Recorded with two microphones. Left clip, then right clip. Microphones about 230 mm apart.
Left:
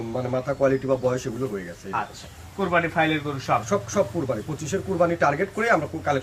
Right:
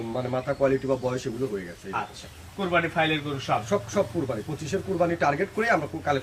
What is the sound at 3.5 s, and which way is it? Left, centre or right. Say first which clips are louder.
Speech: left 3 dB; centre.